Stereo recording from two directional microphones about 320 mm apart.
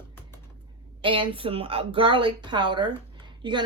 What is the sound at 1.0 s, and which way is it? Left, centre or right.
Speech, centre.